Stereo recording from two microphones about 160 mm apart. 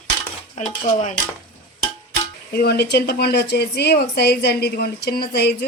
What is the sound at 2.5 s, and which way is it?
A woman's voice, 80° left.